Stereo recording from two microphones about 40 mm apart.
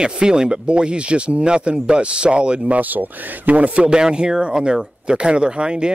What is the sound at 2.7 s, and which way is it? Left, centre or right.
Speech, right.